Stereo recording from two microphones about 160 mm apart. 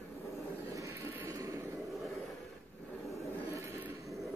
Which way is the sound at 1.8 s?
Centre (ahead or behind).